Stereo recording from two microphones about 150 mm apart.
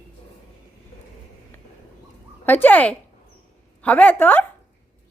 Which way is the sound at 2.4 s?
10° left (ahead or behind).